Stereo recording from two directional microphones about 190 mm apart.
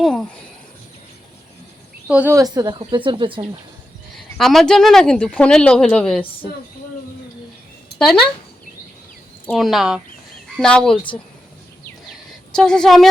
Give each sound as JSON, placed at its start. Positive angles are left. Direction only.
{"t": 0.0, "sound": "speech", "side_deg": 0}
{"t": 2.0, "sound": "speech", "side_deg": -10}
{"t": 4.1, "sound": "speech", "side_deg": 0}
{"t": 7.9, "sound": "speech", "side_deg": 5}
{"t": 9.5, "sound": "speech", "side_deg": 0}
{"t": 12.5, "sound": "speech", "side_deg": 5}